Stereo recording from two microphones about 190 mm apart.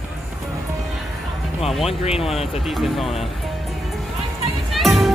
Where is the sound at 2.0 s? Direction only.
30° left (ahead or behind).